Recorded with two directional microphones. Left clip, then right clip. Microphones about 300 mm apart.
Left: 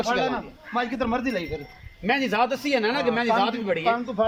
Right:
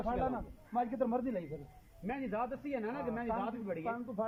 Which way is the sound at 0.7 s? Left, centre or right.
Centre.